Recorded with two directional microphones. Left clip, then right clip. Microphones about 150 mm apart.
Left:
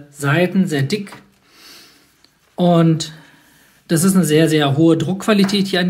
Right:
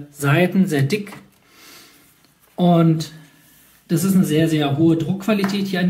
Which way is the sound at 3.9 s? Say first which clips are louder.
Left 4 dB; 55° left (ahead or behind).